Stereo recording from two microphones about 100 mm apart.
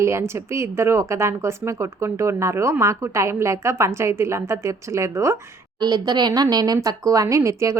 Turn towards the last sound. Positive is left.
turn(degrees=-30)  # may be behind; listen again after turning